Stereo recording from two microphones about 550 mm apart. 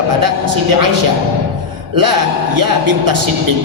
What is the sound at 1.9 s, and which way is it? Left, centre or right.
Throat clearing, right.